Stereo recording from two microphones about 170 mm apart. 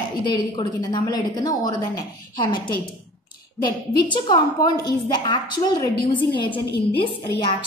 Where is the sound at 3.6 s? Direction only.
25° left (ahead or behind).